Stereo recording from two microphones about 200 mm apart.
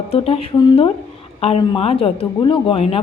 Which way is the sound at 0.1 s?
30° left (ahead or behind).